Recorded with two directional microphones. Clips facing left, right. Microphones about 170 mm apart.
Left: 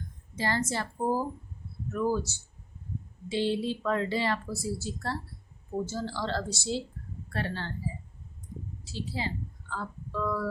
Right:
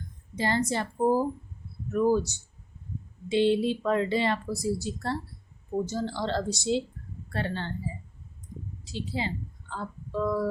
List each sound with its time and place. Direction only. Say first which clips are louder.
0.3 s a woman's voice: right 3 dB; 20° right (ahead or behind)
8.8 s speech: right 3 dB; 20° right (ahead or behind)